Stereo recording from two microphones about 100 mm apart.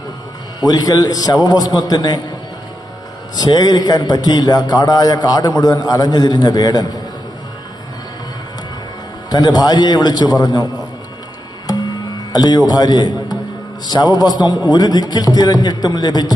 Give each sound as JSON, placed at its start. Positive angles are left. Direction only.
{"t": 0.6, "sound": "a man's voice", "side_deg": 40}
{"t": 3.3, "sound": "a man's voice", "side_deg": 40}
{"t": 9.3, "sound": "a man's voice", "side_deg": 45}
{"t": 12.3, "sound": "a man's voice", "side_deg": 45}